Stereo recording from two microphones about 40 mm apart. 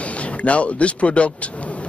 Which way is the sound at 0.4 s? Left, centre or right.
Left.